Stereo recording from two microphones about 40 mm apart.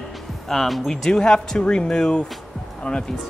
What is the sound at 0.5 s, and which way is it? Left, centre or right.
Speech, centre.